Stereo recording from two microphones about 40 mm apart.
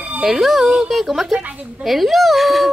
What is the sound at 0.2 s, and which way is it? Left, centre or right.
A child's voice, centre.